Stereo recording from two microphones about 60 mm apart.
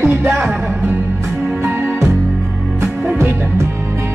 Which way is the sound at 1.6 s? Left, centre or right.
Right.